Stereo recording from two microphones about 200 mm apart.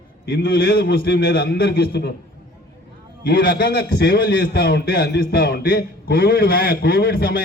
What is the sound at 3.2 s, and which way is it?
A man's voice, 50° left (ahead or behind).